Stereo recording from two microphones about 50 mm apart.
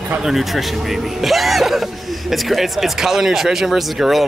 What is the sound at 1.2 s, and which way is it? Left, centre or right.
Speech, centre.